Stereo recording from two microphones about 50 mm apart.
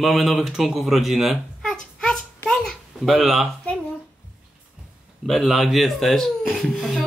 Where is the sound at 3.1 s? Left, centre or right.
Centre.